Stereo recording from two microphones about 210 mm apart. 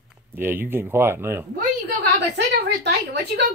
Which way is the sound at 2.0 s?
55° right (ahead or behind).